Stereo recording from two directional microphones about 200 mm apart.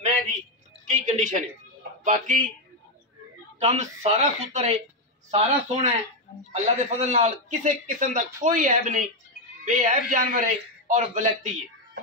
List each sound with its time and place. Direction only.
0.9 s a man's voice: 35° right (ahead or behind)
3.5 s a man's voice: 35° right (ahead or behind)